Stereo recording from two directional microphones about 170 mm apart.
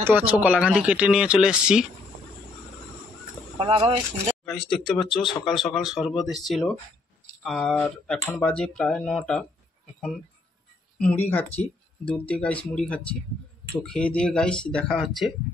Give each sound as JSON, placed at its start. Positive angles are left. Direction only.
{"t": 0.0, "sound": "speech", "side_deg": -10}
{"t": 3.5, "sound": "speech", "side_deg": -30}
{"t": 4.5, "sound": "speech", "side_deg": 0}
{"t": 11.0, "sound": "speech", "side_deg": 10}